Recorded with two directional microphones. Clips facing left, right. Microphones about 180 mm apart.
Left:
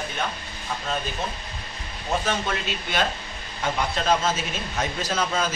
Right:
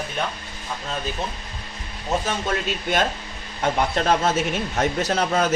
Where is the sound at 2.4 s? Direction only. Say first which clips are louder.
Right 4 dB; 45° right (ahead or behind); by 5.5 s 60° right (ahead or behind).